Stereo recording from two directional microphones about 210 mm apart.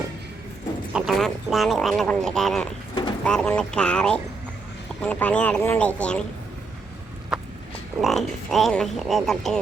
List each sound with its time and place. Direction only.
0.9 s speech: centre (ahead or behind)
2.9 s bird: 20° left (ahead or behind)
3.2 s speech: 5° left (ahead or behind)
8.0 s speech: centre (ahead or behind)